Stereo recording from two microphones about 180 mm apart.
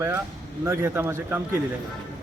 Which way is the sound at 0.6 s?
15° right (ahead or behind).